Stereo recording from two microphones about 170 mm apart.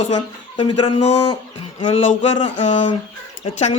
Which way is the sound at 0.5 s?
35° left (ahead or behind).